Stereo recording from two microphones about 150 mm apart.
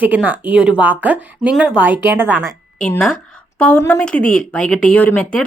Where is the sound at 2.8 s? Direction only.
5° left (ahead or behind).